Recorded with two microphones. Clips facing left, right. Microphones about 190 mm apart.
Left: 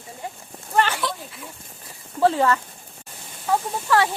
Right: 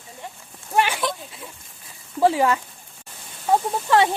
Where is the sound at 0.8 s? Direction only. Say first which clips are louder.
Even; 15° right (ahead or behind).